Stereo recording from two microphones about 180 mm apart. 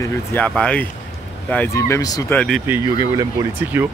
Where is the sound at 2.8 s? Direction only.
20° right (ahead or behind).